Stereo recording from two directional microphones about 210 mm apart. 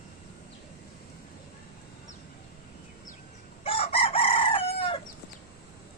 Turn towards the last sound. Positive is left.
turn(degrees=25)  # may be behind; listen again after turning